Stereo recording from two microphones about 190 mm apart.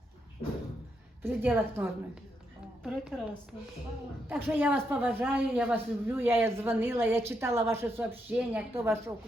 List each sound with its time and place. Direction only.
1.2 s speech: 10° right (ahead or behind)
2.8 s a woman's voice: centre (ahead or behind)
4.3 s speech: 10° right (ahead or behind)